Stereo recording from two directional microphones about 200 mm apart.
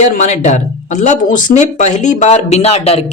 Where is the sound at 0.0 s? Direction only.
35° left (ahead or behind).